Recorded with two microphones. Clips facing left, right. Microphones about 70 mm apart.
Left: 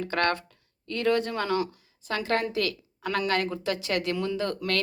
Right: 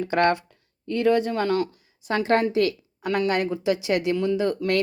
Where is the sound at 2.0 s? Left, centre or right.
Right.